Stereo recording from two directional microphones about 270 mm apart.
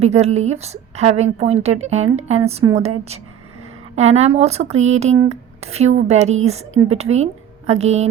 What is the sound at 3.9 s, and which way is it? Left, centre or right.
Speech, right.